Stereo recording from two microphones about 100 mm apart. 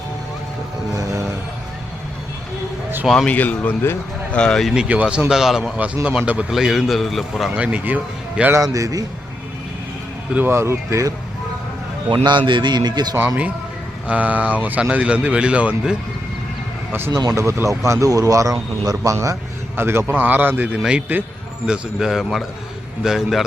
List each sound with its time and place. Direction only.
0.9 s a man's voice: 30° right (ahead or behind)
3.2 s speech: 15° left (ahead or behind)
4.7 s a man's voice: 10° right (ahead or behind)
7.5 s speech: 15° right (ahead or behind)
8.5 s a man's voice: 35° right (ahead or behind)
10.3 s speech: 20° right (ahead or behind)
12.0 s a man's voice: 50° right (ahead or behind)
13.1 s speech: 15° right (ahead or behind)
17.1 s a man's voice: 40° right (ahead or behind); by 23.5 s 5° right (ahead or behind)